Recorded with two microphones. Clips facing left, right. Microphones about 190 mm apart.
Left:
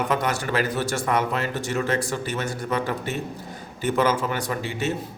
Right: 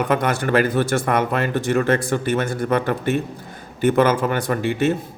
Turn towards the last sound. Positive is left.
turn(degrees=-55)  # may be behind; listen again after turning